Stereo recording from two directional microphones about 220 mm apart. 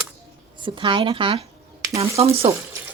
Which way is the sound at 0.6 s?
20° right (ahead or behind).